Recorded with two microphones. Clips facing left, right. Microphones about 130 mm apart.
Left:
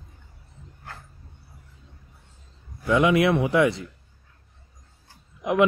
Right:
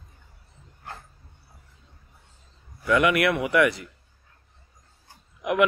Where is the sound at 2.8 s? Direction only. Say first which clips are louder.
Left 2 dB; 25° left (ahead or behind).